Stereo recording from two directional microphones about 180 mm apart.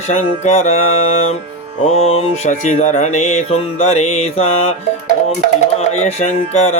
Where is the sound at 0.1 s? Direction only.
40° left (ahead or behind).